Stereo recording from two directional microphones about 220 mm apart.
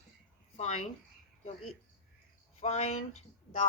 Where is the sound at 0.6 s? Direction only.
30° left (ahead or behind).